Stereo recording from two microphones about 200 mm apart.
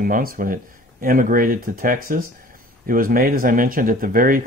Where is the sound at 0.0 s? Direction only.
45° right (ahead or behind).